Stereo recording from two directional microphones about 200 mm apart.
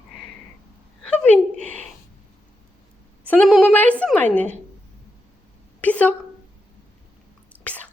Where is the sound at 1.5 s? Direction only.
35° right (ahead or behind).